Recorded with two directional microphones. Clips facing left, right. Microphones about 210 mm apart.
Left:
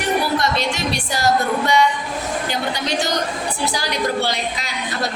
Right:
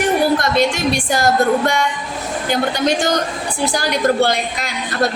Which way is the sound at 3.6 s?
50° right (ahead or behind).